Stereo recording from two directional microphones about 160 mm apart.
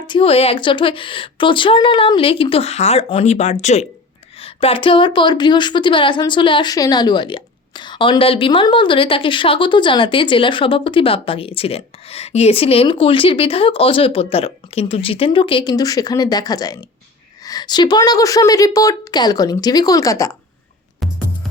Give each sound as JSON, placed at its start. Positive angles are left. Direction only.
{"t": 0.1, "sound": "a woman's voice", "side_deg": 35}
{"t": 4.4, "sound": "a woman's voice", "side_deg": 35}
{"t": 21.0, "sound": "music", "side_deg": 0}